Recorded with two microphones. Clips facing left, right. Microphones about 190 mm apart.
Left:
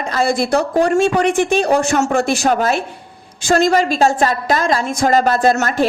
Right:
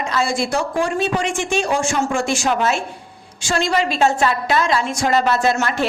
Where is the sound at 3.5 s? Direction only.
45° left (ahead or behind).